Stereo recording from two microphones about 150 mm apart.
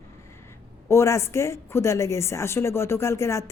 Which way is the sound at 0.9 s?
20° left (ahead or behind).